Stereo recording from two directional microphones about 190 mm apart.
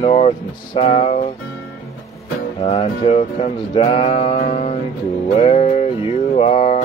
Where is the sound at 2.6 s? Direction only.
30° left (ahead or behind).